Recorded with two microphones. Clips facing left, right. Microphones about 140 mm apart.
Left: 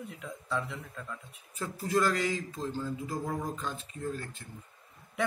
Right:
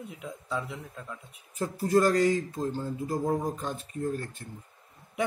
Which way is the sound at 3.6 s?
45° right (ahead or behind).